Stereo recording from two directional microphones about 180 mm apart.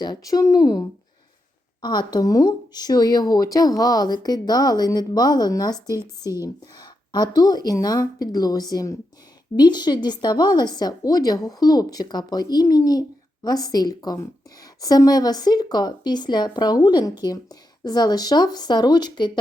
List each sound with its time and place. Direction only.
0.0 s speech: 20° left (ahead or behind)